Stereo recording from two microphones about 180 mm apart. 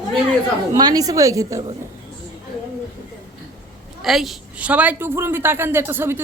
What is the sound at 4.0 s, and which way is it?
A man's voice, centre (ahead or behind).